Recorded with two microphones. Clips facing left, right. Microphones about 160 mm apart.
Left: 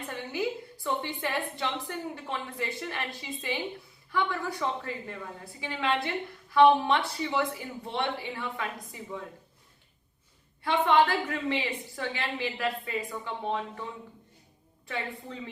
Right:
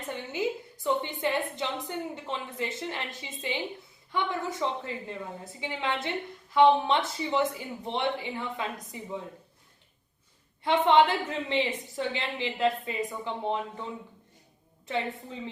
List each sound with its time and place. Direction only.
0.1 s a sound: 20° right (ahead or behind)
1.2 s a woman's voice: 20° right (ahead or behind)
10.6 s a woman's voice: 20° right (ahead or behind)
14.8 s a woman's voice: 20° right (ahead or behind)